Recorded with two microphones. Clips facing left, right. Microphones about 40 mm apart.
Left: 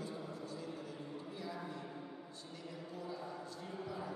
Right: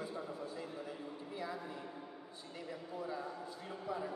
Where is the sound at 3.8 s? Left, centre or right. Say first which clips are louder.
Right 4 dB; centre.